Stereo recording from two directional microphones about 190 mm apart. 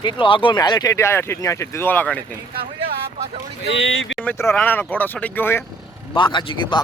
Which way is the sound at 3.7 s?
90° left.